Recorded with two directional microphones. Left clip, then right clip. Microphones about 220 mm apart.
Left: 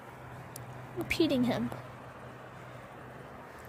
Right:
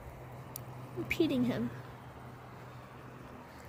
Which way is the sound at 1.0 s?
20° left (ahead or behind).